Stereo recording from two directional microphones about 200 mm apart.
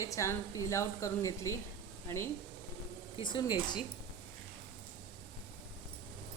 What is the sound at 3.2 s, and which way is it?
Speech, 20° left (ahead or behind).